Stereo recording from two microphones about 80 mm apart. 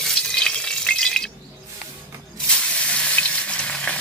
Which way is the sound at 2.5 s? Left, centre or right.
Centre.